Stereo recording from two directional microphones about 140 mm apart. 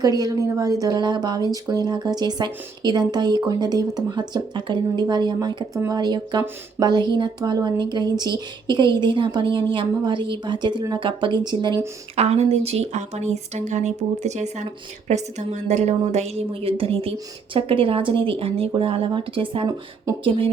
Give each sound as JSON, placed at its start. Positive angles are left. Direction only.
{"t": 0.0, "sound": "speech", "side_deg": -25}
{"t": 12.1, "sound": "speech", "side_deg": -50}